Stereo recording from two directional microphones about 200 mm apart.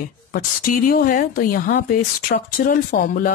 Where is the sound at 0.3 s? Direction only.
45° left (ahead or behind).